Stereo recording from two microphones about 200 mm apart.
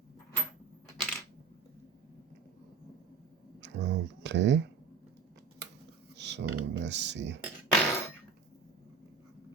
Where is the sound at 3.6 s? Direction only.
60° right (ahead or behind).